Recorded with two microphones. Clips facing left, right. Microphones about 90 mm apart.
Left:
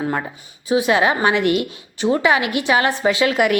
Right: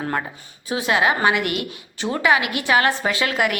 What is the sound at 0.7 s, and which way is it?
A woman's voice, 20° left (ahead or behind).